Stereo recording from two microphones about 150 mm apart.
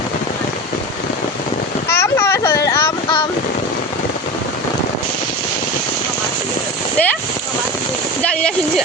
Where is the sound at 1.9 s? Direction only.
15° left (ahead or behind).